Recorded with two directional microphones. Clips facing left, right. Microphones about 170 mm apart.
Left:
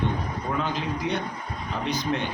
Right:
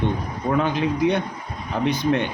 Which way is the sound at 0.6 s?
60° right (ahead or behind).